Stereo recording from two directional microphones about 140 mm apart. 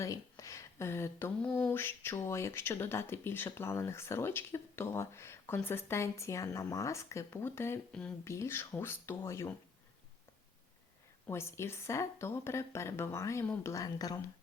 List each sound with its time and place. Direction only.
0.0 s a sound: 25° left (ahead or behind)
1.5 s a woman's voice: 10° left (ahead or behind)
11.3 s a woman's voice: 20° left (ahead or behind)